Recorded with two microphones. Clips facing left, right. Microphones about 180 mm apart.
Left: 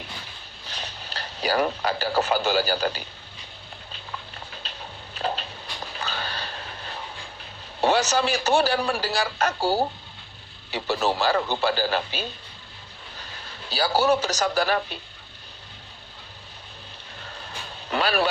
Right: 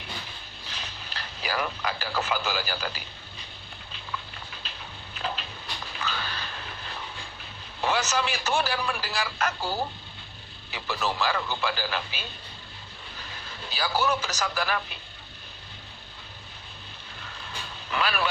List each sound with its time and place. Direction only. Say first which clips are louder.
0.7 s speech: left 4 dB; 35° left (ahead or behind)
5.2 s a sound: left 5 dB; 35° left (ahead or behind)
7.8 s a man's voice: left 5 dB; 35° left (ahead or behind)
13.7 s a man's voice: left 6 dB; 35° left (ahead or behind)
17.9 s a man's voice: left 5 dB; 35° left (ahead or behind)